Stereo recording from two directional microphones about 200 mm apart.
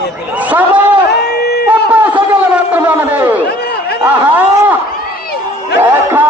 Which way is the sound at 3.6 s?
55° left (ahead or behind).